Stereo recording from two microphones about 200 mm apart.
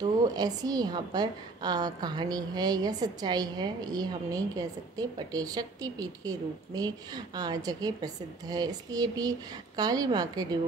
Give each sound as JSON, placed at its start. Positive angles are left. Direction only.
{"t": 0.0, "sound": "a woman's voice", "side_deg": -20}